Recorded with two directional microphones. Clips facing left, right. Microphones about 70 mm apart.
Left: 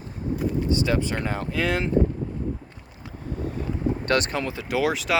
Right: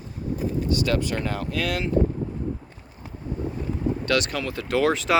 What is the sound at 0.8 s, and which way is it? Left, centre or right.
Speech, left.